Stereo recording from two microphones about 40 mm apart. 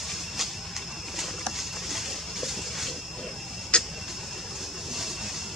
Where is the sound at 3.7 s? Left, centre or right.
Left.